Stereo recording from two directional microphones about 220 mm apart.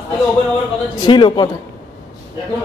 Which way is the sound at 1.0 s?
20° left (ahead or behind).